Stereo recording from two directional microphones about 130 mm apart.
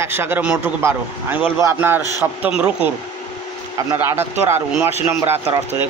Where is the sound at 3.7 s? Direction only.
20° right (ahead or behind).